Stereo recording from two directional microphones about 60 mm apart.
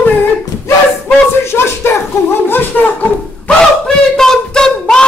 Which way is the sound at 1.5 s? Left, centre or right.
Left.